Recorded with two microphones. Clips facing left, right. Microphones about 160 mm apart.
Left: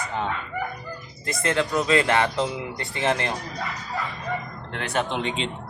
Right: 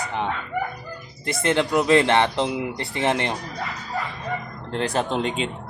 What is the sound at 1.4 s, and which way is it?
Speech, 20° right (ahead or behind).